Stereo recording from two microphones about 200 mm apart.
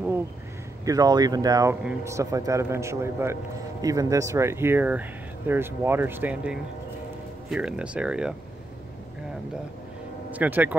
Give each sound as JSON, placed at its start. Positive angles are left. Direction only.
{"t": 0.8, "sound": "a man's voice", "side_deg": -20}
{"t": 10.3, "sound": "a man's voice", "side_deg": -10}